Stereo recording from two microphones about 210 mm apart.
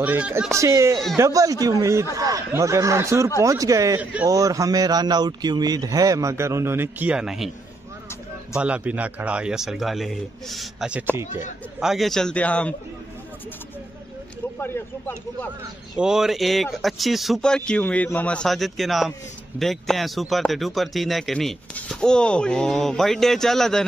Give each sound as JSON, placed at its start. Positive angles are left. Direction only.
{"t": 0.0, "sound": "a man's voice", "side_deg": -10}
{"t": 8.5, "sound": "speech", "side_deg": -5}
{"t": 14.6, "sound": "speech", "side_deg": 10}
{"t": 16.0, "sound": "speech", "side_deg": -5}